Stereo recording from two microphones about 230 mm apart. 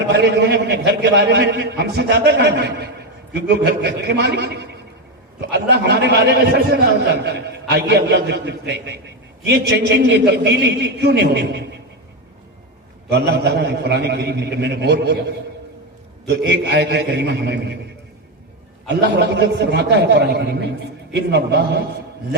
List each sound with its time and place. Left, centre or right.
0.1 s a man's voice: right
13.1 s a man's voice: right
16.2 s a man's voice: right
18.9 s a man's voice: right